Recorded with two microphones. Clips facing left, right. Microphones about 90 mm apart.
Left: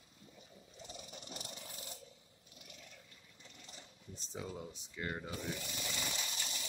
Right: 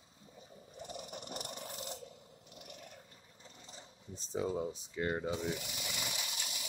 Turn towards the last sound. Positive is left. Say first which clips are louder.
# even
turn(degrees=-10)  # may be behind; listen again after turning